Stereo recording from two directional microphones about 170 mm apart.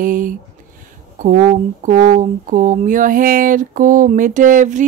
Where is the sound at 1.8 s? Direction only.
50° right (ahead or behind).